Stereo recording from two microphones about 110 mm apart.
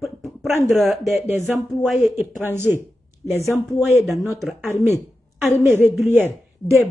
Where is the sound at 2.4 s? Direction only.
20° right (ahead or behind).